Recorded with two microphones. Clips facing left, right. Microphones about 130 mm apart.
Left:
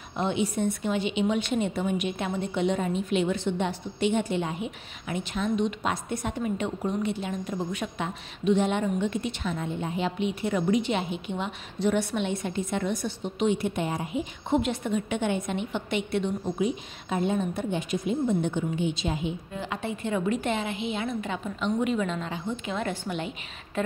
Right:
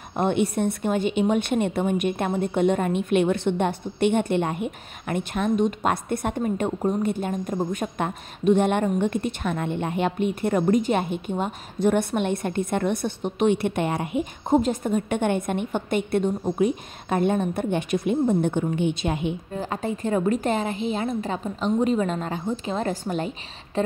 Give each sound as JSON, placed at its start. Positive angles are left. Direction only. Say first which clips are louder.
{"t": 0.1, "sound": "a woman's voice", "louder": "right 5 dB", "side_deg": -55}
{"t": 14.5, "sound": "a woman's voice", "louder": "right 5 dB", "side_deg": -40}
{"t": 19.5, "sound": "a woman's voice", "louder": "right 4 dB", "side_deg": -40}